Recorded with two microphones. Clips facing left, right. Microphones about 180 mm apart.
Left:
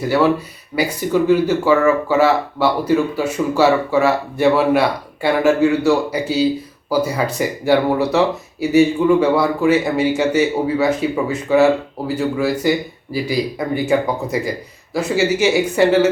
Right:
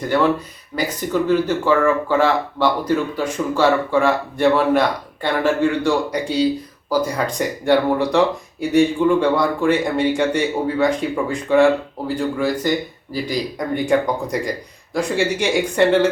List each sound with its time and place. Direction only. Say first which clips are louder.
0.0 s a man's voice: left 2 dB; 5° left (ahead or behind)